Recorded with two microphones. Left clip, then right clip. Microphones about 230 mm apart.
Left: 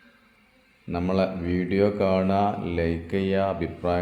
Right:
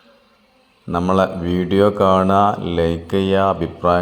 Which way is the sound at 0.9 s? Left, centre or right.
Centre.